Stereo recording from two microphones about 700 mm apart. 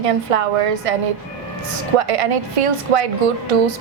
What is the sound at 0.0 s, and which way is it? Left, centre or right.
Speech, right.